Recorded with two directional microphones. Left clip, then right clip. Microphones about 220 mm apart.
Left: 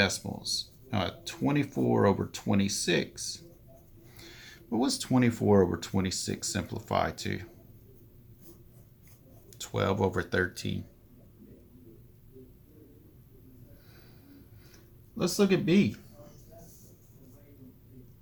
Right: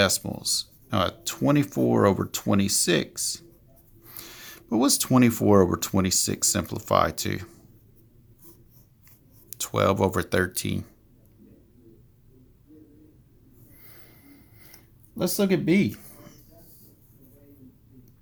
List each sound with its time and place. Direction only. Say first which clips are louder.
0.0 s speech: right 5 dB; 50° right (ahead or behind)
9.5 s speech: right 7 dB; 50° right (ahead or behind)
15.2 s speech: right 2 dB; 45° right (ahead or behind)